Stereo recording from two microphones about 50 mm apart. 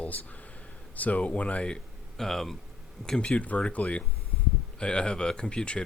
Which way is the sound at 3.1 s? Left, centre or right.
Left.